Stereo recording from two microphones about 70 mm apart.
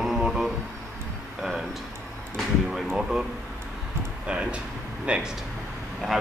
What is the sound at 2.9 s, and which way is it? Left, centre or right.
Speech, centre.